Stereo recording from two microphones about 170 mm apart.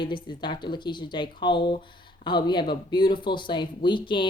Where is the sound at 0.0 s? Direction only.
25° left (ahead or behind).